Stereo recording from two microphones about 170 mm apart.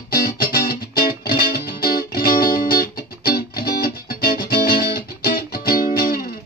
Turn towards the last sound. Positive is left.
turn(degrees=60)  # may be behind; listen again after turning